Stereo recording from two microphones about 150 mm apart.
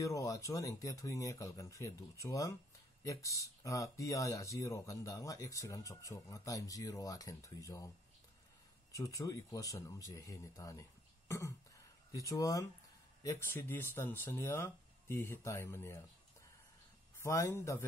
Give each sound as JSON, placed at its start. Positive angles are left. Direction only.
{"t": 0.0, "sound": "speech", "side_deg": 20}
{"t": 8.9, "sound": "speech", "side_deg": 20}
{"t": 17.2, "sound": "speech", "side_deg": 20}